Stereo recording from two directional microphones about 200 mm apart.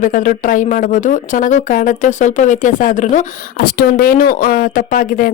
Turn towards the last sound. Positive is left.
turn(degrees=45)  # may be behind; listen again after turning